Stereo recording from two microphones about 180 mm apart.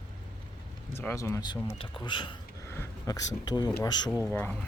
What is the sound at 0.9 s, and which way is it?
Speech, 15° left (ahead or behind).